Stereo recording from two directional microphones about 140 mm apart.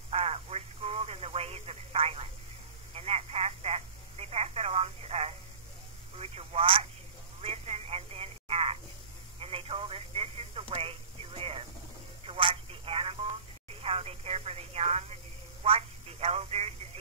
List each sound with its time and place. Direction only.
0.1 s telephone: 45° right (ahead or behind)